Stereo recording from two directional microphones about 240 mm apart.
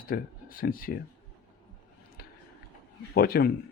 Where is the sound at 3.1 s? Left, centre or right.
Left.